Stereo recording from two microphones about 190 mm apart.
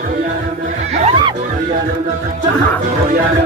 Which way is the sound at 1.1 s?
25° right (ahead or behind).